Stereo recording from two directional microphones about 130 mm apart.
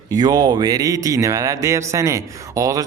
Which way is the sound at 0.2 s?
30° right (ahead or behind).